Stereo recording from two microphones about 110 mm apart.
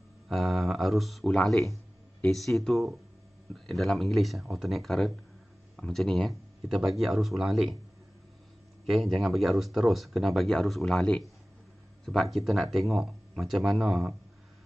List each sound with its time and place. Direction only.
0.3 s speech: centre (ahead or behind)
8.8 s speech: centre (ahead or behind)